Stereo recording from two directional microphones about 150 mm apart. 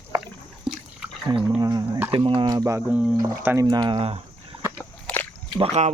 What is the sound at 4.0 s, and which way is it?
Speech, 40° right (ahead or behind).